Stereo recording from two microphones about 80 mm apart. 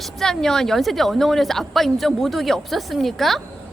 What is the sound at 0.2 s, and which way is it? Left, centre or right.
Speech, centre.